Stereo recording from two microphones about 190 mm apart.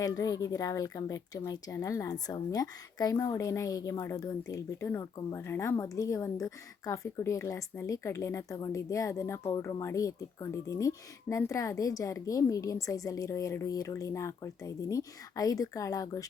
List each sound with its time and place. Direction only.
0.0 s speech: 20° left (ahead or behind)